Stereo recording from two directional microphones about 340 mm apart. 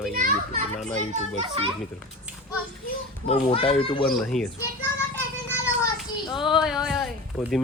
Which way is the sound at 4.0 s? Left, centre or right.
Centre.